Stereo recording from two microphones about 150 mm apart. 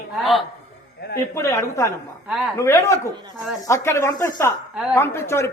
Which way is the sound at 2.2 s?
5° right (ahead or behind).